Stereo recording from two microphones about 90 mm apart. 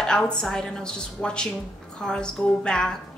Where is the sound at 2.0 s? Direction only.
10° left (ahead or behind).